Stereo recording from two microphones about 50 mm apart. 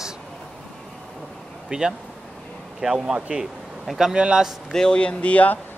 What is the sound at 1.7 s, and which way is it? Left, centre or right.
Speech, centre.